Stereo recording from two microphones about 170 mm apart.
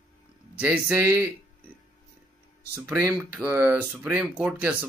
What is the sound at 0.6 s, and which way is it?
Speech, 10° right (ahead or behind).